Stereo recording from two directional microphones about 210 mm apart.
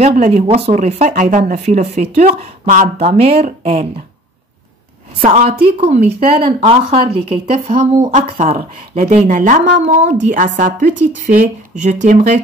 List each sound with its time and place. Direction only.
0.0 s a woman's voice: 35° right (ahead or behind)
5.2 s a woman's voice: 30° right (ahead or behind)